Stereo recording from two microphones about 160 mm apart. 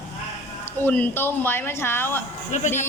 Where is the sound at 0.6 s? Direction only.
10° left (ahead or behind).